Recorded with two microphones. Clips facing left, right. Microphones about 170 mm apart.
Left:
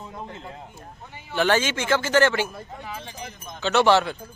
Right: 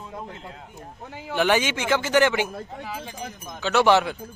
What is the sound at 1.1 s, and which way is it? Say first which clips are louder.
Speech: right 8 dB; 90° right.